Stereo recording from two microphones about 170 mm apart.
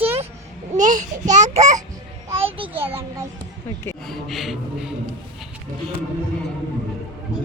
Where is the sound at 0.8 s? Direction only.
50° right (ahead or behind).